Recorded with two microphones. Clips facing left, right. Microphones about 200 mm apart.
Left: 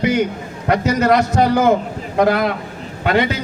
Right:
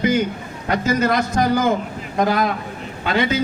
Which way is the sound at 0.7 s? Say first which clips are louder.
Left 4 dB; 65° left (ahead or behind).